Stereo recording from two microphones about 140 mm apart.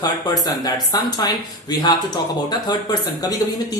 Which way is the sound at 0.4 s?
30° left (ahead or behind).